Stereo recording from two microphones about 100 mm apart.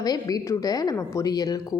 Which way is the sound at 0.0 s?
40° left (ahead or behind).